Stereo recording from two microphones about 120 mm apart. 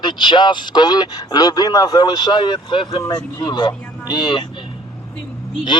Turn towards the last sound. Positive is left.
turn(degrees=40)  # may be behind; listen again after turning